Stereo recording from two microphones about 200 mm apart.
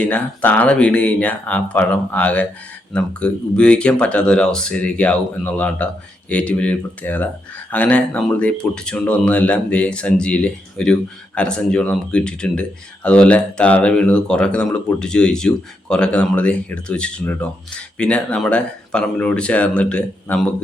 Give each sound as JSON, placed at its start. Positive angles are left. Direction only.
{"t": 0.0, "sound": "speech", "side_deg": 5}